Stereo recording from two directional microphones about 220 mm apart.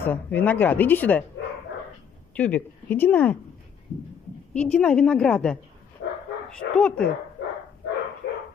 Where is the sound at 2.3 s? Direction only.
5° left (ahead or behind).